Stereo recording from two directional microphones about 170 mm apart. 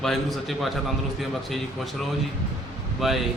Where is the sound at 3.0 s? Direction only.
Centre (ahead or behind).